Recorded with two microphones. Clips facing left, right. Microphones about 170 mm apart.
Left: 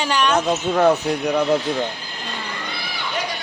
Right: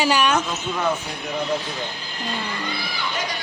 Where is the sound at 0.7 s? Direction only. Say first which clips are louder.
Left 9 dB; 70° left (ahead or behind).